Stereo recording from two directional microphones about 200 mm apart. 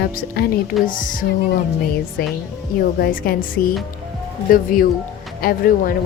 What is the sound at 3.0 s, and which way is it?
Speech, 45° left (ahead or behind).